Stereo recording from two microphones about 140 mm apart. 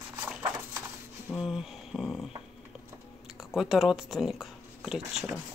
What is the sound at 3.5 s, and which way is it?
Speech, centre (ahead or behind).